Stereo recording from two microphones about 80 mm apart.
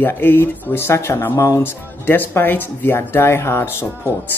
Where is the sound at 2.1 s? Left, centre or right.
Left.